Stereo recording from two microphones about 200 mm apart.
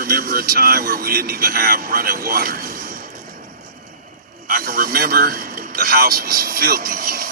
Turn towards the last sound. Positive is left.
turn(degrees=-50)  # may be behind; listen again after turning